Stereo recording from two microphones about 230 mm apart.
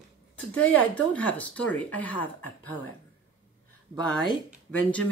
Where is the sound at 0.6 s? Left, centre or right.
Centre.